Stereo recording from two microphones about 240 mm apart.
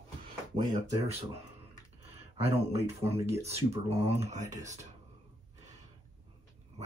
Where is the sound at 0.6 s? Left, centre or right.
Right.